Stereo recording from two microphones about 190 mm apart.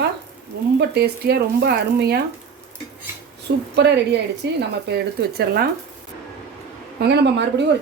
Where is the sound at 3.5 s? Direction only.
65° right (ahead or behind).